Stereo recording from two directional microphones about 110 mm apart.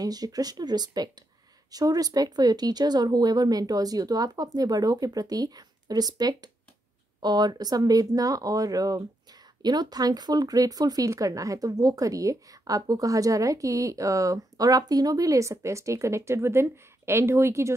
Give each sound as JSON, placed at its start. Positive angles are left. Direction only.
{"t": 0.0, "sound": "speech", "side_deg": -35}